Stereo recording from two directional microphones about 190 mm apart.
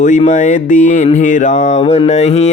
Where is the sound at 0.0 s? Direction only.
40° left (ahead or behind).